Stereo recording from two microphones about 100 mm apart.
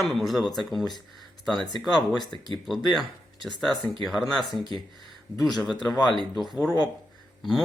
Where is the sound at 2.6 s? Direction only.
Centre (ahead or behind).